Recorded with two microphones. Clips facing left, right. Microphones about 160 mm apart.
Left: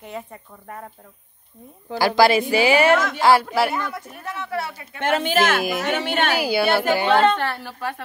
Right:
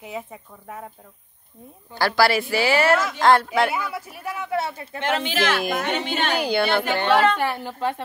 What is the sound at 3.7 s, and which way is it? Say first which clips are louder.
Speech: left 1 dB; 5° right (ahead or behind).